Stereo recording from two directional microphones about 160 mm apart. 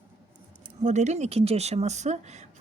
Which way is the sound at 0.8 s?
45° right (ahead or behind).